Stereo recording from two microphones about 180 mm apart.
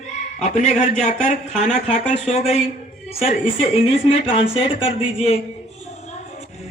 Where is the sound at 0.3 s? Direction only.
40° left (ahead or behind).